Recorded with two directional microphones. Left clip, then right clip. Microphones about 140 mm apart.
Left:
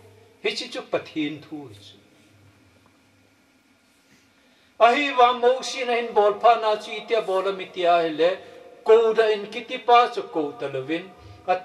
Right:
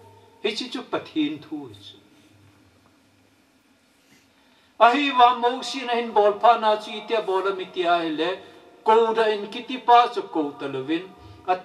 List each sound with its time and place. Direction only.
0.4 s a man's voice: 30° right (ahead or behind)
4.7 s a man's voice: 25° right (ahead or behind)